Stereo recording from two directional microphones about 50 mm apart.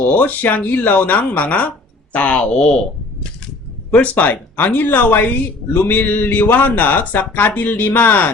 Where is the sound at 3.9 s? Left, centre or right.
Left.